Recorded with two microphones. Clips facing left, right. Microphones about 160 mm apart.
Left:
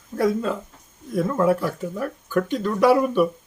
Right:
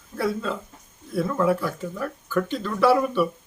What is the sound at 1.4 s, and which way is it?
Speech, 40° left (ahead or behind).